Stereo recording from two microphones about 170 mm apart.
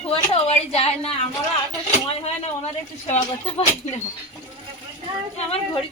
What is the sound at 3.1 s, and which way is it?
Speech, 40° left (ahead or behind).